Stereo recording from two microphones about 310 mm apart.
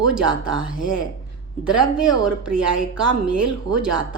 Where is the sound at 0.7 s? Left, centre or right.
Left.